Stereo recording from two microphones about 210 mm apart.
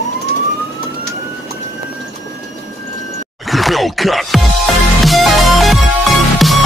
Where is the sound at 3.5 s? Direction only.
Centre (ahead or behind).